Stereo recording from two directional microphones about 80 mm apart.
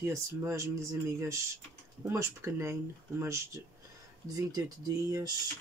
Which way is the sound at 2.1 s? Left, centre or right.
Right.